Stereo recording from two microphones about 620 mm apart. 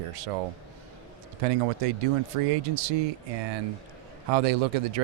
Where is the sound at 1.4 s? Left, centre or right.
Right.